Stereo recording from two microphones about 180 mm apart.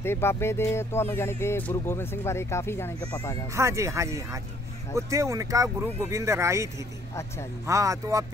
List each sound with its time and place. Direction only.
0.0 s speech: 15° left (ahead or behind)
3.5 s speech: 15° right (ahead or behind)